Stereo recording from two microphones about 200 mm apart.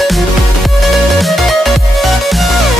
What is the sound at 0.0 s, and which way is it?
Music, centre (ahead or behind).